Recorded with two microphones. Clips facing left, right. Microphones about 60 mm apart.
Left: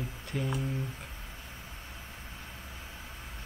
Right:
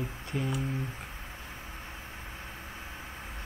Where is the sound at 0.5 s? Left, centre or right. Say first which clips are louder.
Right 1 dB; right.